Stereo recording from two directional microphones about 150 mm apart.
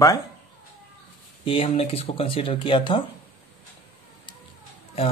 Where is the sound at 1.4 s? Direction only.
40° left (ahead or behind).